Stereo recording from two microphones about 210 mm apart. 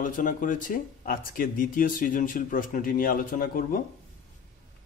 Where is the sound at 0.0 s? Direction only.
40° left (ahead or behind).